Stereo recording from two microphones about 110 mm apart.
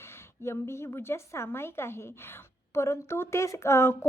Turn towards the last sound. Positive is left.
turn(degrees=25)  # may be behind; listen again after turning